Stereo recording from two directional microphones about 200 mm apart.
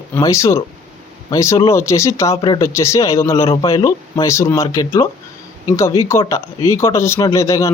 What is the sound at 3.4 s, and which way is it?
Speech, 25° left (ahead or behind).